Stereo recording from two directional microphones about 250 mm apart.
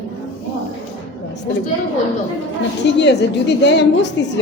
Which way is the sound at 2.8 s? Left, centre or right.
Left.